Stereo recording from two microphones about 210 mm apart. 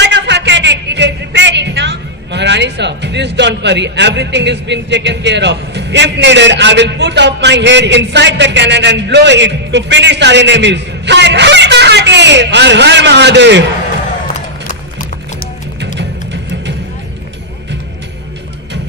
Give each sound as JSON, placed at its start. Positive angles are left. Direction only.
{"t": 0.0, "sound": "speech", "side_deg": -55}
{"t": 14.6, "sound": "music", "side_deg": 40}
{"t": 16.0, "sound": "music", "side_deg": -55}